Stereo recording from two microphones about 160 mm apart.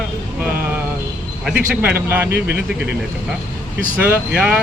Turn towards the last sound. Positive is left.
turn(degrees=-10)  # may be behind; listen again after turning